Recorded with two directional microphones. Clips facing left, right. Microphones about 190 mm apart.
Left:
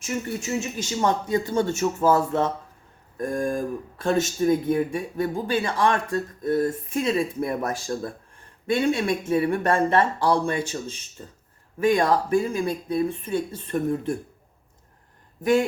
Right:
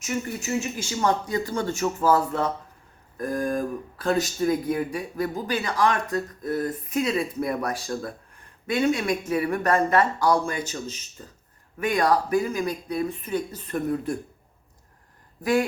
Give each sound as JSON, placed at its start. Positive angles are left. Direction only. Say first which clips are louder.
{"t": 0.0, "sound": "speech", "louder": "left 1 dB", "side_deg": 25}